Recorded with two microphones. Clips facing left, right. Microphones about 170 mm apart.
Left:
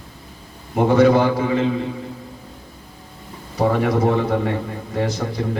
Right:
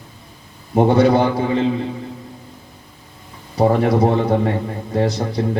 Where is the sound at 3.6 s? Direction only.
30° right (ahead or behind).